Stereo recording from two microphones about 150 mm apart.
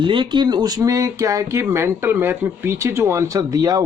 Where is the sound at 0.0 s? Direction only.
35° right (ahead or behind).